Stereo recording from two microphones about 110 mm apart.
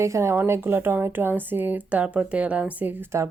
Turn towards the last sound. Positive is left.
turn(degrees=-15)  # may be behind; listen again after turning